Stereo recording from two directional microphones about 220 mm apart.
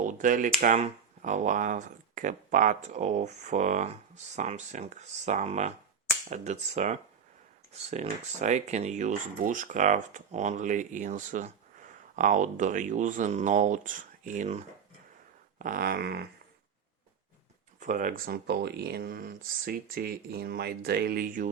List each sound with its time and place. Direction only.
0.0 s speech: 35° right (ahead or behind)
17.7 s speech: 35° right (ahead or behind)